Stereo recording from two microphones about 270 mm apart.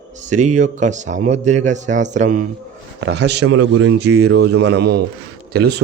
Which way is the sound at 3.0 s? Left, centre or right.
Right.